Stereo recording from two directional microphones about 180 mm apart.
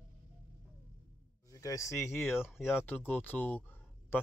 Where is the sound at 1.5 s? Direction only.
20° left (ahead or behind).